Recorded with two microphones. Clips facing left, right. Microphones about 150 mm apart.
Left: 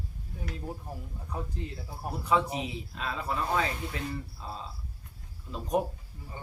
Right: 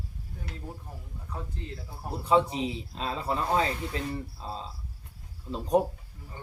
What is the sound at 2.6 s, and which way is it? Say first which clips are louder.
Speech: right 3 dB; 30° right (ahead or behind).